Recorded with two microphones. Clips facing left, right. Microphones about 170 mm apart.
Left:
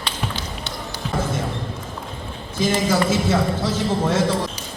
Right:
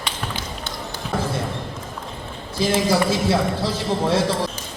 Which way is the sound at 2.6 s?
35° right (ahead or behind).